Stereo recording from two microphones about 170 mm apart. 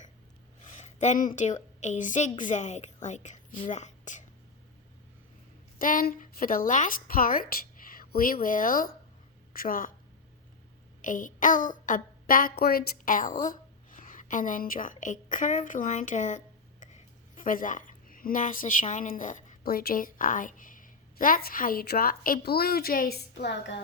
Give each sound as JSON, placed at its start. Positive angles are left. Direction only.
{"t": 0.7, "sound": "a woman's voice", "side_deg": 45}
{"t": 5.8, "sound": "a woman's voice", "side_deg": 55}
{"t": 11.0, "sound": "a child's voice", "side_deg": 50}